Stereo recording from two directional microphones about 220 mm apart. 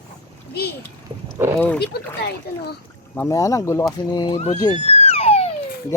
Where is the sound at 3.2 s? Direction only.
15° left (ahead or behind).